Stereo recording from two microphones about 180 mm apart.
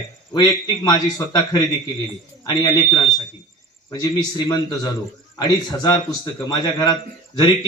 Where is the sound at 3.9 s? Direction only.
25° left (ahead or behind).